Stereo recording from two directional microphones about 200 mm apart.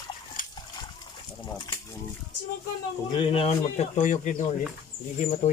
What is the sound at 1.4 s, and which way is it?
Speech, 20° left (ahead or behind).